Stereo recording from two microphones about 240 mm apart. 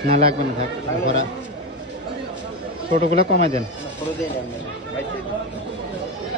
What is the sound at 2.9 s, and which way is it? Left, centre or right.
Speech, right.